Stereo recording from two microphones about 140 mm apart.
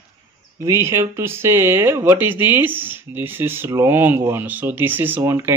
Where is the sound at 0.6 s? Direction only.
20° right (ahead or behind).